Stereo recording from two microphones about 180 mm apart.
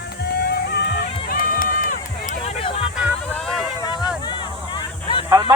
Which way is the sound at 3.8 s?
20° left (ahead or behind).